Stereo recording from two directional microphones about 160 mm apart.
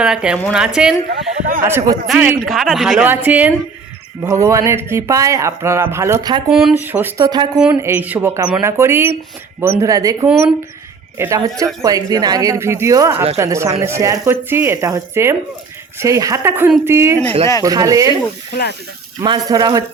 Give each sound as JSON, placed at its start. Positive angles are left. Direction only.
{"t": 0.0, "sound": "speech", "side_deg": -5}
{"t": 1.1, "sound": "a man's voice", "side_deg": -60}
{"t": 1.6, "sound": "speech", "side_deg": -15}
{"t": 6.5, "sound": "speech", "side_deg": -5}
{"t": 7.3, "sound": "speech", "side_deg": -25}
{"t": 7.6, "sound": "speech", "side_deg": -10}
{"t": 19.2, "sound": "speech", "side_deg": -25}